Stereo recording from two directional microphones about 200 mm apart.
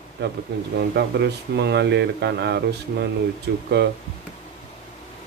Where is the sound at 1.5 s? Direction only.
60° right (ahead or behind).